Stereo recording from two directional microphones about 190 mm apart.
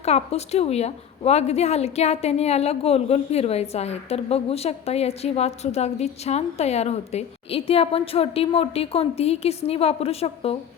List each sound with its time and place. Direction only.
0.0 s a woman's voice: 35° left (ahead or behind)